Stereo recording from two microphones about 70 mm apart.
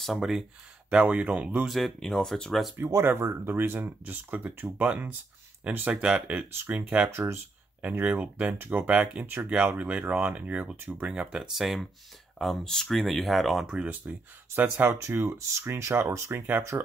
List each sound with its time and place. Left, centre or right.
0.0 s speech: centre
0.8 s speech: centre
1.7 s speech: centre
3.0 s speech: right; by 6.3 s centre
6.3 s speech: right
6.7 s speech: centre
8.9 s speech: centre
13.8 s speech: right
15.0 s speech: right